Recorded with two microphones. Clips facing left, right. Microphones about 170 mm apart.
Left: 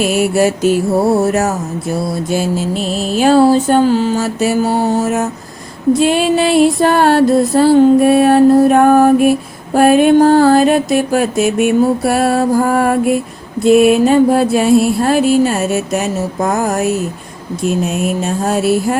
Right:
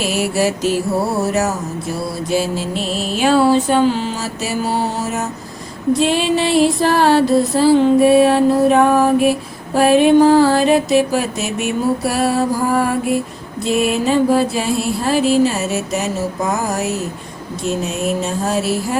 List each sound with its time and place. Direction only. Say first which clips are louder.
0.0 s music: left 5 dB; 55° left (ahead or behind)
2.3 s mantra: left 1 dB; 50° left (ahead or behind)
6.0 s music: left 3 dB; 55° left (ahead or behind)
18.4 s music: left 7 dB; 55° left (ahead or behind)